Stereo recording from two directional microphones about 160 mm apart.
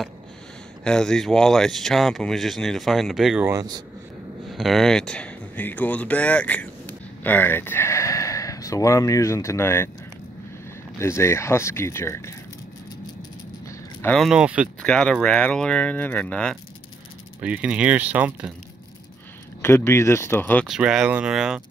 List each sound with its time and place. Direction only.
0.8 s speech: 5° left (ahead or behind)
3.4 s speech: 25° right (ahead or behind)
4.5 s speech: centre (ahead or behind)
11.0 s speech: 15° left (ahead or behind)
14.1 s speech: centre (ahead or behind)
14.8 s speech: 5° left (ahead or behind)
17.4 s speech: 10° right (ahead or behind)
19.6 s speech: 15° left (ahead or behind)
20.6 s speech: 5° right (ahead or behind)